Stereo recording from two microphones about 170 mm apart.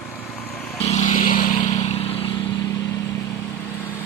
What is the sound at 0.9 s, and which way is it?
Vehicle, 45° left (ahead or behind).